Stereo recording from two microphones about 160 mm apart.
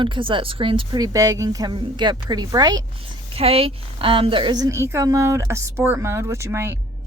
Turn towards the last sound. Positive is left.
turn(degrees=-15)  # may be behind; listen again after turning